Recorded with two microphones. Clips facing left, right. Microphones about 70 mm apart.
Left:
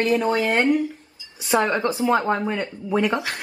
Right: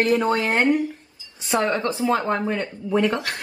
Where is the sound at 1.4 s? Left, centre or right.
Left.